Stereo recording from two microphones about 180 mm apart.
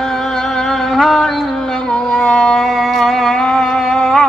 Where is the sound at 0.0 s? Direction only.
Centre (ahead or behind).